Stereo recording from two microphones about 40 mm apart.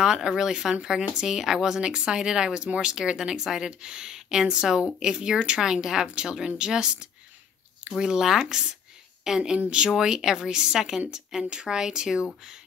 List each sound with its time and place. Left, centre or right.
0.0 s a woman's voice: centre